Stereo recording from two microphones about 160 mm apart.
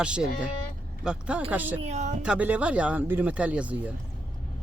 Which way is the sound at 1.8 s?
45° right (ahead or behind).